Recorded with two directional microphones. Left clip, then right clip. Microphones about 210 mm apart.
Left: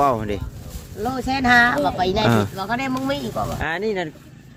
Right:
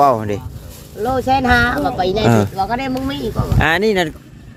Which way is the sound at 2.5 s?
45° left (ahead or behind).